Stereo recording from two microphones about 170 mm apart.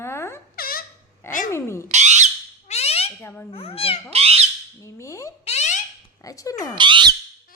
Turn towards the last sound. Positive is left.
turn(degrees=-25)  # may be behind; listen again after turning